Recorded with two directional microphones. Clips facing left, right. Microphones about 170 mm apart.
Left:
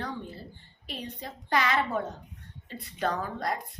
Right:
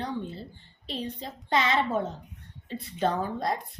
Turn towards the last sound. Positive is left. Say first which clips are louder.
# right 3 dB
turn(degrees=-25)  # may be behind; listen again after turning